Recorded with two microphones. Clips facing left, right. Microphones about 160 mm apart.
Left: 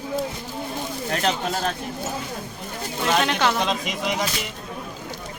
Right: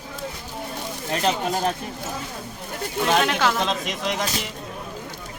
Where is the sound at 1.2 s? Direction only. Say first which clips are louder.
Right 2 dB; 15° right (ahead or behind).